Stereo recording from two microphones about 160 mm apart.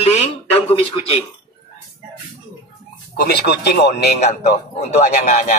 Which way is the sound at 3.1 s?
80° left.